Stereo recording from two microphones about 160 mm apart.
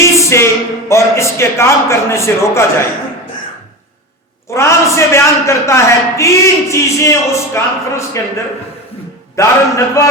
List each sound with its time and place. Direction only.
0.0 s a man's voice: 15° left (ahead or behind)
4.5 s a man's voice: 15° left (ahead or behind)
9.3 s a man's voice: 20° left (ahead or behind)